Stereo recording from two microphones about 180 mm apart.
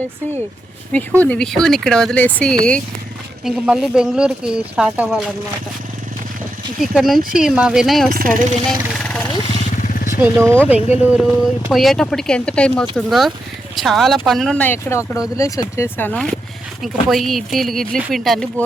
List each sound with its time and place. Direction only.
1.2 s speech: 5° left (ahead or behind)
6.7 s speech: centre (ahead or behind)
8.1 s speech: 50° right (ahead or behind)
9.9 s vehicle: 50° left (ahead or behind)
10.2 s speech: 10° right (ahead or behind)
10.8 s speech: 35° left (ahead or behind)
11.0 s speech: 5° right (ahead or behind)